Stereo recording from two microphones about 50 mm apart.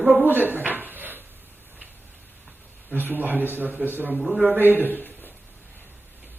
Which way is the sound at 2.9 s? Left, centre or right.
Right.